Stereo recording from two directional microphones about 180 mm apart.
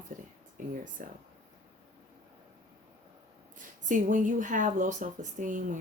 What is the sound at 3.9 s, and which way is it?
Speech, 45° right (ahead or behind).